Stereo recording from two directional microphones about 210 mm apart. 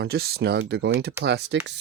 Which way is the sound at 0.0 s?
50° right (ahead or behind).